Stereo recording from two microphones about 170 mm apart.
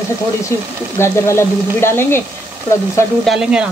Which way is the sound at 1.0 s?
15° left (ahead or behind).